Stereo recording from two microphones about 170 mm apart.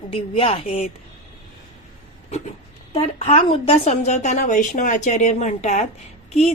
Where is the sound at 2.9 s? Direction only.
35° left (ahead or behind).